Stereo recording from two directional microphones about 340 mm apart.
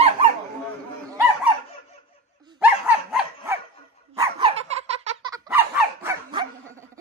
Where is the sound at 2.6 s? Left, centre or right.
Centre.